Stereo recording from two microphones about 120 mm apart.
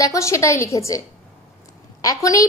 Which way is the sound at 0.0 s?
25° left (ahead or behind).